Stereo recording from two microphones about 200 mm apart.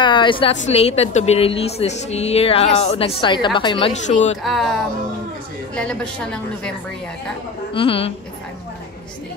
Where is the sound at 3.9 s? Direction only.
35° left (ahead or behind).